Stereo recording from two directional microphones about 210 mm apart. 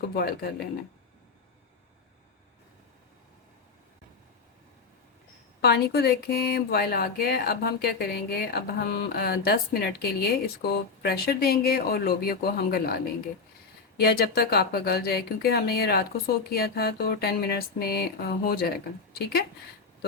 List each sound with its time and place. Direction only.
0.1 s speech: 45° left (ahead or behind)
5.6 s speech: 50° left (ahead or behind)